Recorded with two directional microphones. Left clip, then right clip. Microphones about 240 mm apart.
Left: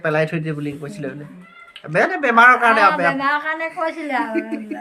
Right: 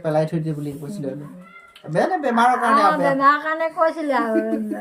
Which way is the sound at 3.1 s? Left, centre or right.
Right.